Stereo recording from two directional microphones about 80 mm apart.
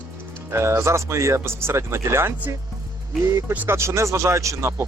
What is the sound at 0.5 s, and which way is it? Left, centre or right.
Speech, right.